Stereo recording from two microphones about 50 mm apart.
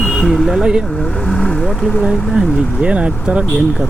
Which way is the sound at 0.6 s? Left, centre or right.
Centre.